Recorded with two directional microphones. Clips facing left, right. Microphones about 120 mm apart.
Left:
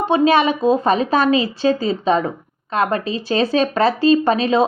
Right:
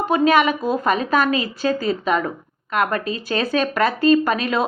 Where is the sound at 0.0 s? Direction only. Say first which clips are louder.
Left 2 dB; 30° left (ahead or behind).